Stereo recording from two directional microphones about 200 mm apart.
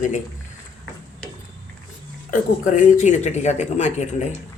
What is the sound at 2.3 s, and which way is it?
Speech, 40° left (ahead or behind).